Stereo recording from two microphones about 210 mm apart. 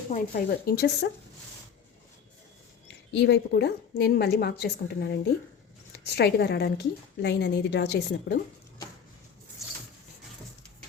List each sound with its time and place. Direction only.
0.1 s a woman's voice: 45° left (ahead or behind)
2.8 s a woman's voice: 55° left (ahead or behind)
6.1 s a woman's voice: 50° left (ahead or behind)